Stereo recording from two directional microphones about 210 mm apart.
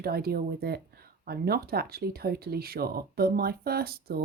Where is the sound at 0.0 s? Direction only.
45° right (ahead or behind).